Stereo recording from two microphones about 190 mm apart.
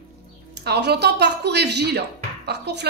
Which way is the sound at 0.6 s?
60° right (ahead or behind).